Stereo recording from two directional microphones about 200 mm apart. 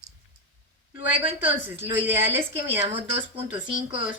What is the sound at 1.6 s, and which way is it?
A woman's voice, 10° right (ahead or behind).